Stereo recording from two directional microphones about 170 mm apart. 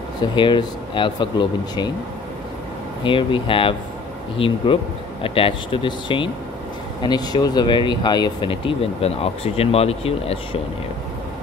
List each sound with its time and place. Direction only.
0.4 s speech: 25° left (ahead or behind)
3.0 s speech: 30° left (ahead or behind)